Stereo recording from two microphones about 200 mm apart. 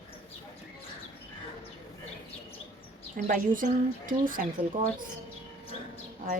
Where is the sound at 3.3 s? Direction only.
45° right (ahead or behind).